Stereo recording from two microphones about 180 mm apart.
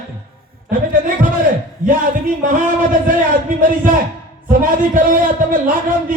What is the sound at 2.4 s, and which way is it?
A man's voice, 50° right (ahead or behind).